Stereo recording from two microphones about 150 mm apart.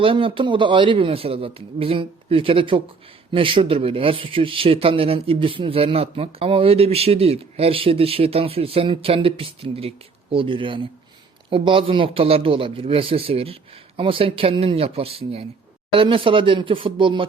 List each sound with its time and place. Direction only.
0.0 s speech: 35° right (ahead or behind)